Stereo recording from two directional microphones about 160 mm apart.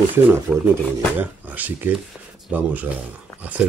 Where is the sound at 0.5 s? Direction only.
5° right (ahead or behind).